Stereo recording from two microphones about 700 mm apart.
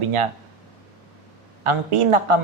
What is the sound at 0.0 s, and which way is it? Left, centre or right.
Speech, right.